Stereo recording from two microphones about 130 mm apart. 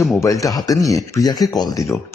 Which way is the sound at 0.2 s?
25° left (ahead or behind).